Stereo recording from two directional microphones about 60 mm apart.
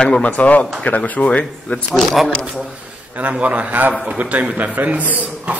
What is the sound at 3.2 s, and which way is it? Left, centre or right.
A man's voice, right.